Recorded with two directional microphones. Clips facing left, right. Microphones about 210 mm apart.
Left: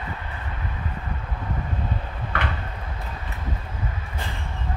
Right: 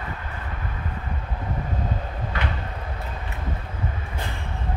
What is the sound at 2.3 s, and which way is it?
Vehicle, 60° left (ahead or behind).